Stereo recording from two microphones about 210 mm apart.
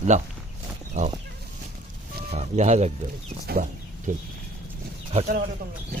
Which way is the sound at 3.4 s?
40° right (ahead or behind).